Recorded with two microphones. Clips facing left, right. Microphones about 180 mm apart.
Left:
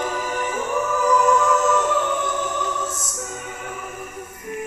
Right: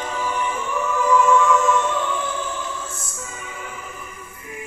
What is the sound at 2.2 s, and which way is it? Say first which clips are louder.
Music: left 3 dB; 70° left (ahead or behind).